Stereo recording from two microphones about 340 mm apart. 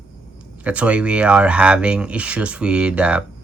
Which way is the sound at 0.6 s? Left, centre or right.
Centre.